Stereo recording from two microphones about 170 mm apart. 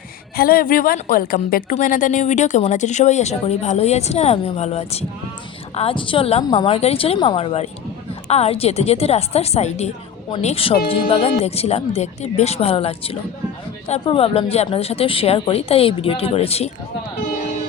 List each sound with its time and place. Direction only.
0.3 s a woman's voice: 60° left (ahead or behind); by 6.7 s 25° left (ahead or behind)
6.7 s speech: 35° left (ahead or behind)